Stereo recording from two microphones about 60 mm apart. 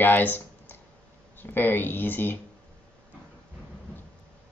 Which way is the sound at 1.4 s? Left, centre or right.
Left.